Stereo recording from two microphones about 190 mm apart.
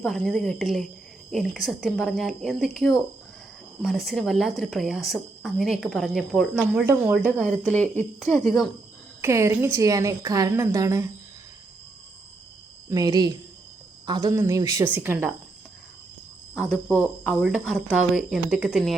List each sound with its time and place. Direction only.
0.0 s a woman's voice: centre (ahead or behind)
7.2 s a woman's voice: 5° left (ahead or behind)
8.4 s speech: centre (ahead or behind)
9.2 s a woman's voice: 15° right (ahead or behind)
12.9 s a woman's voice: 20° right (ahead or behind)
16.6 s speech: 5° left (ahead or behind)